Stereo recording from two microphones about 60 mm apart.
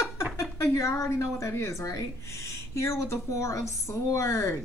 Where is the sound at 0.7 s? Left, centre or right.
Left.